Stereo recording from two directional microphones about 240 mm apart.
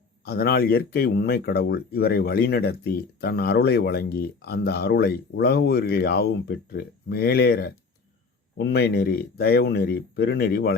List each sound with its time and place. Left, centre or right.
0.3 s speech: left